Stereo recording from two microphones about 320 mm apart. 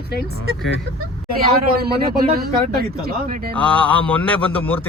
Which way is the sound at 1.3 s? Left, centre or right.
Right.